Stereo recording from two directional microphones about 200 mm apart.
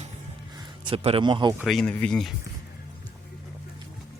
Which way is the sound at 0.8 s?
25° right (ahead or behind).